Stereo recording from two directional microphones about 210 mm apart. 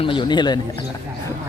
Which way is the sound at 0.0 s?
25° left (ahead or behind).